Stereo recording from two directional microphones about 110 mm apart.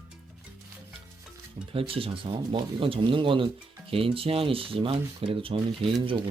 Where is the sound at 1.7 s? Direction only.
55° right (ahead or behind).